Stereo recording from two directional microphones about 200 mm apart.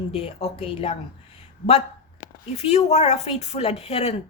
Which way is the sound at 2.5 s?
35° left (ahead or behind).